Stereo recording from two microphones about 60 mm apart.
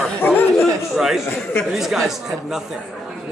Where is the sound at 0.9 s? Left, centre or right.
Centre.